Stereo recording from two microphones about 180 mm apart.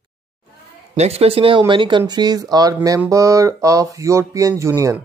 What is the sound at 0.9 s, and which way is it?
Speech, 35° right (ahead or behind).